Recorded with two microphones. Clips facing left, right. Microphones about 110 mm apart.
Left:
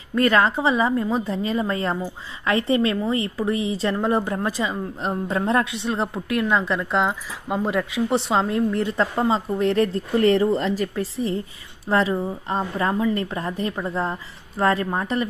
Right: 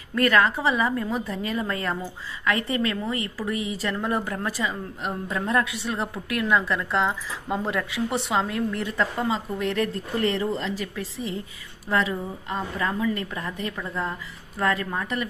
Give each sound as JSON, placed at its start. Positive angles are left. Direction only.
{"t": 0.1, "sound": "a woman's voice", "side_deg": 25}